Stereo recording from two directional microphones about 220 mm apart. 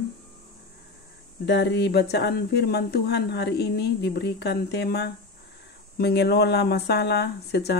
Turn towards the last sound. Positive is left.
turn(degrees=50)  # may be behind; listen again after turning